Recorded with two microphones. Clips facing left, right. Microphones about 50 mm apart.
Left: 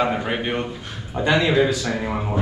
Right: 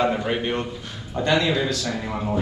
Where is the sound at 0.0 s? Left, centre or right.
Centre.